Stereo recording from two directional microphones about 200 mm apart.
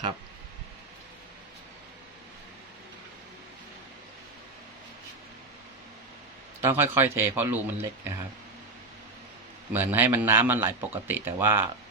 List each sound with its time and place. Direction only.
6.6 s speech: 10° right (ahead or behind)
9.7 s speech: 10° right (ahead or behind)